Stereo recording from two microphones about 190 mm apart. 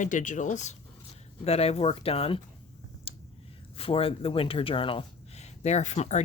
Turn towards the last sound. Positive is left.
turn(degrees=35)  # may be behind; listen again after turning